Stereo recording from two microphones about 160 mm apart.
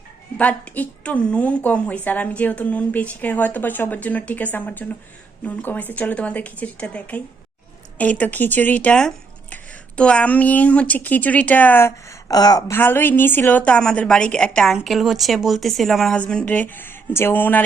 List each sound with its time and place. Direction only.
0.3 s speech: 10° left (ahead or behind)